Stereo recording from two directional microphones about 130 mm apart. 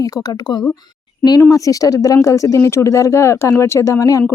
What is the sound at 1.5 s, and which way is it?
Speech, 25° left (ahead or behind).